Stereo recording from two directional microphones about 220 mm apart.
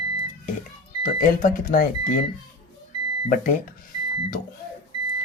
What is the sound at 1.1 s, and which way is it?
Speech, 40° left (ahead or behind).